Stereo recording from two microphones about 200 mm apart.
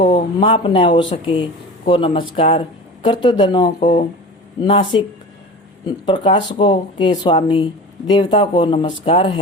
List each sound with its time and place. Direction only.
0.0 s speech: 25° left (ahead or behind)